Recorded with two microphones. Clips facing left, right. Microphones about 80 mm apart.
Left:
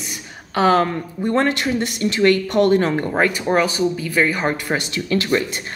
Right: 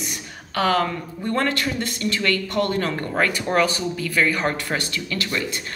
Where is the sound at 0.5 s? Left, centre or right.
Left.